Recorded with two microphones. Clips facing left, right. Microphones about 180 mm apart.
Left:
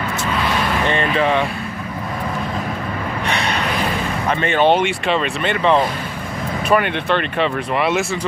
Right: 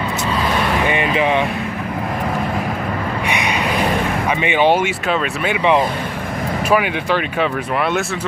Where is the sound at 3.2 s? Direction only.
10° right (ahead or behind).